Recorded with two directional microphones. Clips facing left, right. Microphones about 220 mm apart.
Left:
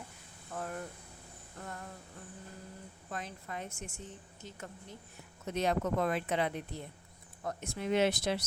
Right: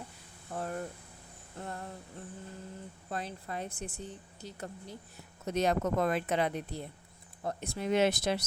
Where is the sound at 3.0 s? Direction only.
35° right (ahead or behind).